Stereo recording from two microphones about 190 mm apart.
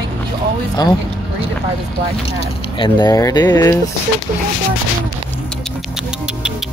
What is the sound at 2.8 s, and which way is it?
Speech, 20° left (ahead or behind).